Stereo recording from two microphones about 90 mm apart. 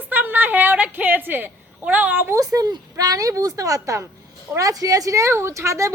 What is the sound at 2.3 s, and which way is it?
Speech, 40° right (ahead or behind).